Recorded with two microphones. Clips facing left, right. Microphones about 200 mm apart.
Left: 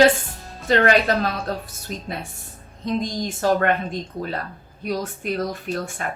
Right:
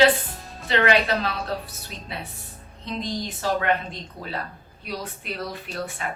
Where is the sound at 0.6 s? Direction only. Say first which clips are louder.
Left 4 dB; 45° left (ahead or behind).